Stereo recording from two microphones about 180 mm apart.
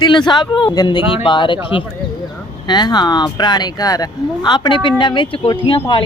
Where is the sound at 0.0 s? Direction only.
25° left (ahead or behind).